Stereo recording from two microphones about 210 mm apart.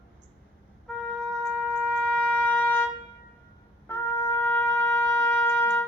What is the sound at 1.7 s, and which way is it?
Trumpet, 5° left (ahead or behind).